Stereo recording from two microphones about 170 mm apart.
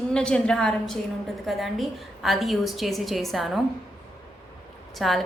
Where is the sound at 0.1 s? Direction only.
5° left (ahead or behind).